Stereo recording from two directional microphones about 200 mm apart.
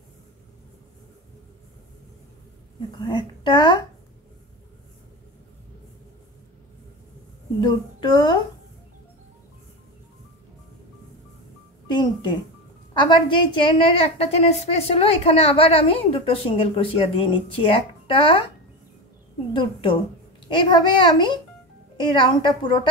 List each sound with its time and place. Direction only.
3.0 s a woman's voice: 25° left (ahead or behind)
7.6 s a woman's voice: 20° left (ahead or behind)
13.1 s a woman's voice: 25° left (ahead or behind)
19.5 s a woman's voice: 25° left (ahead or behind)